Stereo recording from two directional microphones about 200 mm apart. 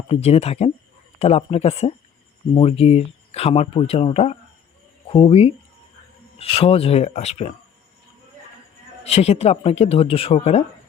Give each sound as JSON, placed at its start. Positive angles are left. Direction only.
{"t": 0.1, "sound": "speech", "side_deg": 30}
{"t": 9.0, "sound": "speech", "side_deg": 30}